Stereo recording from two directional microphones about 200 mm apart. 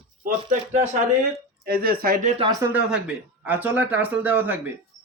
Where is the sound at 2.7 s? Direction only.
5° right (ahead or behind).